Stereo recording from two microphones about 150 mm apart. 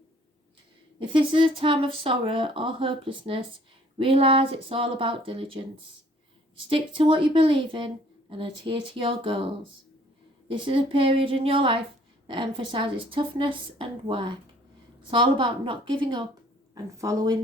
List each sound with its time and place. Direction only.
0.9 s speech: 35° right (ahead or behind)
6.7 s speech: 40° right (ahead or behind)
10.5 s speech: 35° right (ahead or behind)